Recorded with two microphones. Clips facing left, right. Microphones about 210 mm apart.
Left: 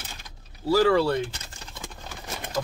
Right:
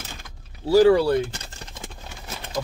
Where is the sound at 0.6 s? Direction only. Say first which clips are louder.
Right 5 dB; 15° right (ahead or behind).